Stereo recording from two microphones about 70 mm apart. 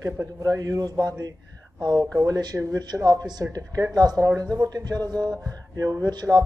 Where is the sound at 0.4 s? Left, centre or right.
Right.